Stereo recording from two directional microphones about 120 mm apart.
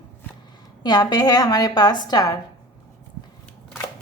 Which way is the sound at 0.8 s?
35° left (ahead or behind).